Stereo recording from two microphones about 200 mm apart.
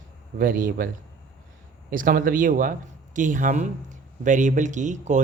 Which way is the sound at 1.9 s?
45° right (ahead or behind).